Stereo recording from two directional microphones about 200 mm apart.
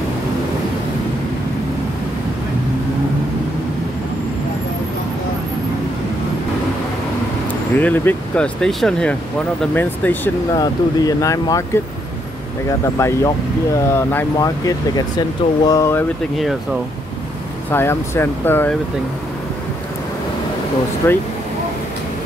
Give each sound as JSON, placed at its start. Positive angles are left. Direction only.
{"t": 7.8, "sound": "speech", "side_deg": 10}
{"t": 17.6, "sound": "speech", "side_deg": 10}
{"t": 21.0, "sound": "speech", "side_deg": 10}